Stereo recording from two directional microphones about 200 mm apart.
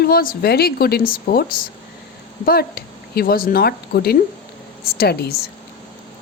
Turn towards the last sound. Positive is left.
turn(degrees=55)  # may be behind; listen again after turning